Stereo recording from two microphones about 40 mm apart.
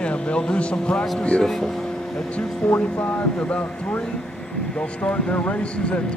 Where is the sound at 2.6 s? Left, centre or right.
Left.